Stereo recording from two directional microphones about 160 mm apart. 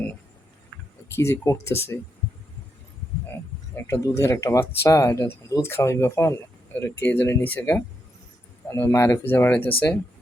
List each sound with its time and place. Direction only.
1.1 s speech: 15° left (ahead or behind)
3.8 s speech: 15° left (ahead or behind)